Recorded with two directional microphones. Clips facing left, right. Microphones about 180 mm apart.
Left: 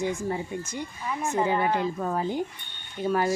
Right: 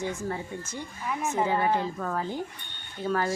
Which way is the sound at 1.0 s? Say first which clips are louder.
Left 1 dB; 5° right (ahead or behind).